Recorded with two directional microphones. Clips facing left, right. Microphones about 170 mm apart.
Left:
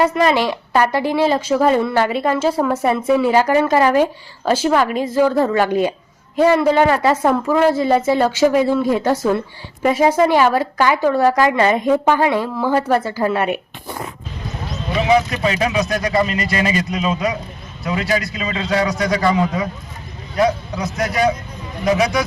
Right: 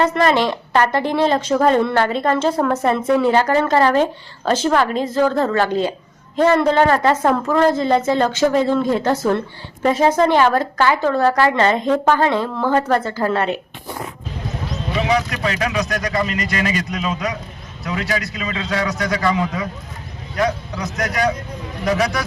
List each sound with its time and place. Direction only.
0.0 s a woman's voice: 10° left (ahead or behind)
15.3 s a man's voice: 25° left (ahead or behind)
18.3 s a man's voice: 30° left (ahead or behind)